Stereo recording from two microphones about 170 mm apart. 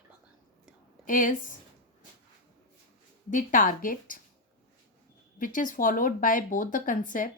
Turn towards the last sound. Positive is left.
turn(degrees=50)  # may be behind; listen again after turning